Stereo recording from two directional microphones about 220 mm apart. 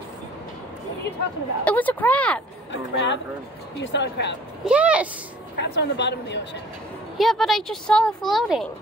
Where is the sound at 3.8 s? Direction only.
50° left (ahead or behind).